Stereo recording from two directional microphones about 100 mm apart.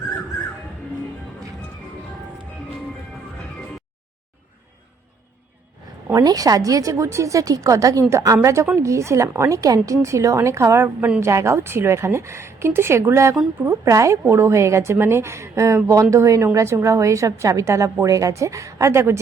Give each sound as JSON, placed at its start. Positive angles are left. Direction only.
{"t": 6.1, "sound": "a woman's voice", "side_deg": -35}